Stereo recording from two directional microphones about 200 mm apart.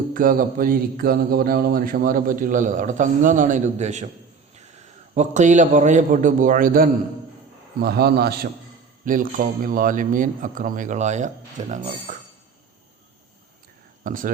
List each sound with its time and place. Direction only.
0.1 s speech: 45° right (ahead or behind)
5.1 s a man's voice: 35° right (ahead or behind); by 8.4 s 55° right (ahead or behind)
9.0 s a man's voice: 40° right (ahead or behind)
12.1 s a sound: 40° right (ahead or behind)
14.0 s speech: 40° right (ahead or behind)